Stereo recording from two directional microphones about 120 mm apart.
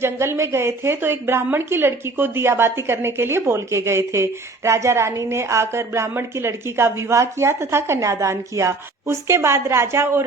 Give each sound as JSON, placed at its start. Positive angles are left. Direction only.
{"t": 0.0, "sound": "a woman's voice", "side_deg": -20}